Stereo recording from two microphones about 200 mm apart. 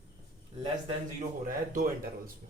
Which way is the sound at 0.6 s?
25° right (ahead or behind).